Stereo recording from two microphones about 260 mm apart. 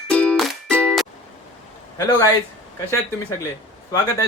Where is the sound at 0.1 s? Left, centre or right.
Centre.